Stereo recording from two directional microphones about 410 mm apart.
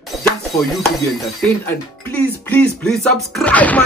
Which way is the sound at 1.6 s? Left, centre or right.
Centre.